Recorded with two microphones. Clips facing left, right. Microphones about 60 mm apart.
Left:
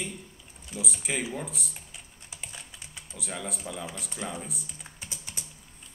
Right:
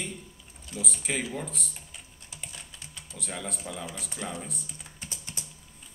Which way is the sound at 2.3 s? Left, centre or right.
Centre.